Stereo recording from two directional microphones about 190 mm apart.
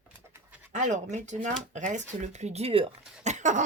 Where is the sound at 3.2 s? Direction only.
40° right (ahead or behind).